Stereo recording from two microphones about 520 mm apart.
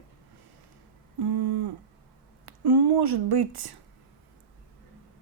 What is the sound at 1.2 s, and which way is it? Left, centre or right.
Speech, right.